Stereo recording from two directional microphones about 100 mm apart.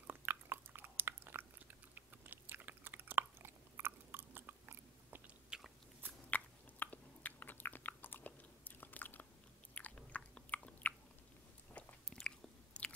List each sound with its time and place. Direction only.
0.0 s biting: 20° right (ahead or behind)
5.5 s biting: 10° right (ahead or behind)
6.3 s chewing: 15° left (ahead or behind)
9.8 s biting: 15° left (ahead or behind)